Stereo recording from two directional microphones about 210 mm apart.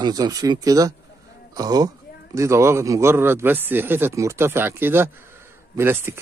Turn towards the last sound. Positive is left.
turn(degrees=-10)  # may be behind; listen again after turning